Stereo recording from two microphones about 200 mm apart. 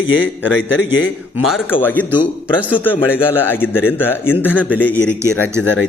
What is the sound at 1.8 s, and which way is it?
A man's voice, 10° left (ahead or behind).